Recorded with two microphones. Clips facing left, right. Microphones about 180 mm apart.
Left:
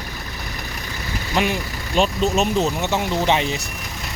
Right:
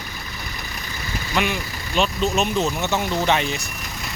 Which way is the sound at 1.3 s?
30° left (ahead or behind).